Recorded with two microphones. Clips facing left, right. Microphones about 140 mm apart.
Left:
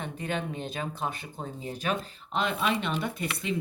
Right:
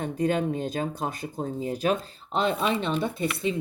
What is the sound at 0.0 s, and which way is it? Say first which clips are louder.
Speech: right 8 dB; 40° right (ahead or behind).